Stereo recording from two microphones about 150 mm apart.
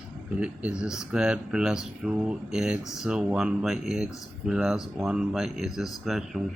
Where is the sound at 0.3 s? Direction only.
5° right (ahead or behind).